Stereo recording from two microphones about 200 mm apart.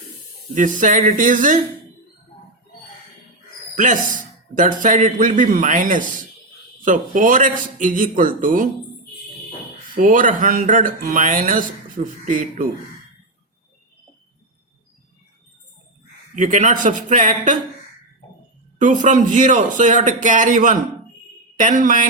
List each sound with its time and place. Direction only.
0.5 s speech: 40° right (ahead or behind)
3.8 s speech: 40° right (ahead or behind)
9.9 s speech: 40° right (ahead or behind)
16.4 s speech: 40° right (ahead or behind)
18.8 s a woman's voice: 40° right (ahead or behind)